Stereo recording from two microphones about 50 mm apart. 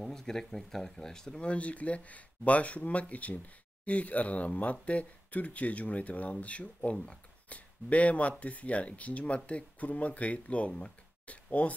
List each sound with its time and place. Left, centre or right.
0.0 s speech: centre; by 11.7 s left